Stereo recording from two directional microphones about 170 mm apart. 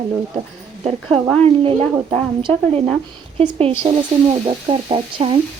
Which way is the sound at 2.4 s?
30° right (ahead or behind).